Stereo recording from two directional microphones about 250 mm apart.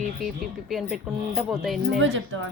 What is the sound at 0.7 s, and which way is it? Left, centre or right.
A woman's voice, centre.